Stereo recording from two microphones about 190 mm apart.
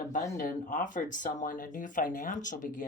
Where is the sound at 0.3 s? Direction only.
45° left (ahead or behind).